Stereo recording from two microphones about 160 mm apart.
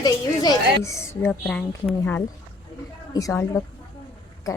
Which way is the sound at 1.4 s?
5° left (ahead or behind).